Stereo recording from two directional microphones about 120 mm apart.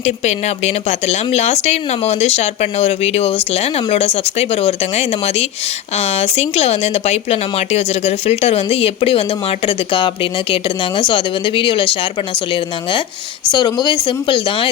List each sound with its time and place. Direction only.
0.0 s speech: 65° left (ahead or behind); by 14.7 s 45° left (ahead or behind)